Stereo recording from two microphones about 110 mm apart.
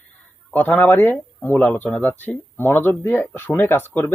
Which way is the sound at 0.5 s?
15° left (ahead or behind).